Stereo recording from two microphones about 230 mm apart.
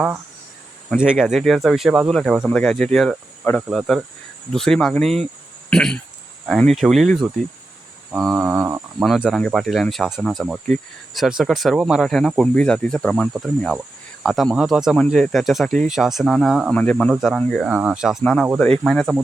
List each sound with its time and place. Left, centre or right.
0.9 s speech: centre
8.3 s speech: centre